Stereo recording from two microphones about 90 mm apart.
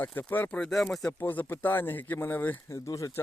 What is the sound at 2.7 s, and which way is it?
Speech, 35° left (ahead or behind).